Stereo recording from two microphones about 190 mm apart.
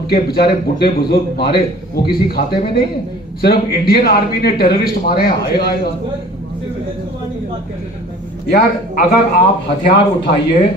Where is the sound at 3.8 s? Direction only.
55° left (ahead or behind).